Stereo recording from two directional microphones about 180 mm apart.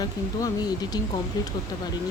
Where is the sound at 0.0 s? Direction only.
20° left (ahead or behind).